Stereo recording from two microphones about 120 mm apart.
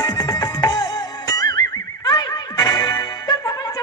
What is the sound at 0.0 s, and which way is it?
Music, 35° left (ahead or behind).